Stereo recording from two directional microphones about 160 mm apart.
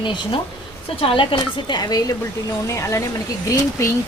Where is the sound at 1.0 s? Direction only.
30° left (ahead or behind).